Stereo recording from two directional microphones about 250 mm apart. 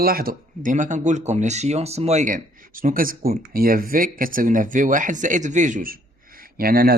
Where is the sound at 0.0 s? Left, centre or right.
Right.